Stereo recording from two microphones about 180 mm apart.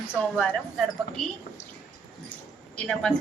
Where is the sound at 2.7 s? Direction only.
5° left (ahead or behind).